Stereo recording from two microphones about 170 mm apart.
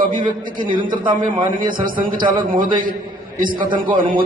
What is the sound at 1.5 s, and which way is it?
A man's voice, 55° right (ahead or behind).